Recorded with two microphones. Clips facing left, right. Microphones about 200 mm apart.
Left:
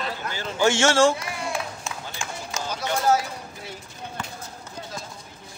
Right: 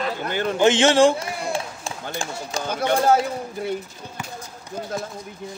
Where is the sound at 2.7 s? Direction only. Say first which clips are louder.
Right 4 dB; 55° right (ahead or behind).